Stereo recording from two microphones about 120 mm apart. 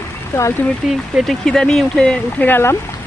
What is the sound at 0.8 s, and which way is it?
Speech, 5° right (ahead or behind).